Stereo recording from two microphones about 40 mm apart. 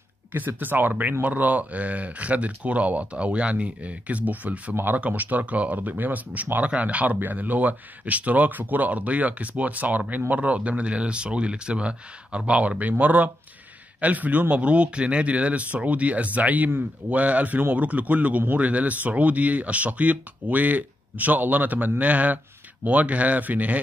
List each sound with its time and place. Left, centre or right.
0.6 s speech: right
7.2 s speech: right
14.5 s speech: right